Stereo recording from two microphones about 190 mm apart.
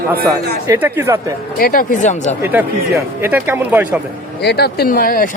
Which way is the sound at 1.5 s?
50° left (ahead or behind).